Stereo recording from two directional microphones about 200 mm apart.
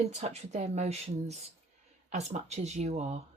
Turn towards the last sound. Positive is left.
turn(degrees=-35)  # may be behind; listen again after turning